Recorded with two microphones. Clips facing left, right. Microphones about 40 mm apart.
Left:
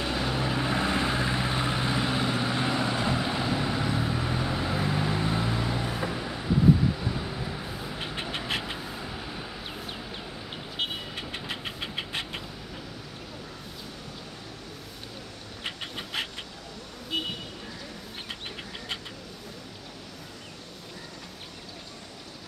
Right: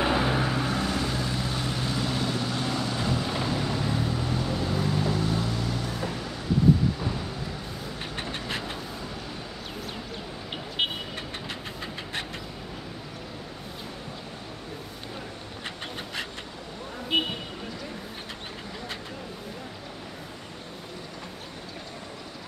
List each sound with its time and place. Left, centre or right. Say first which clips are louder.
0.0 s vehicle: right 5 dB; right
0.5 s vehicle: left 1 dB; centre
7.4 s vehicle: left 1 dB; centre
10.8 s vehicle: right 4 dB; right
17.1 s vehicle: right 6 dB; right